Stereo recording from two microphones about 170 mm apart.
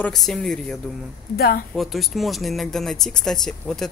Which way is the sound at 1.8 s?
Centre (ahead or behind).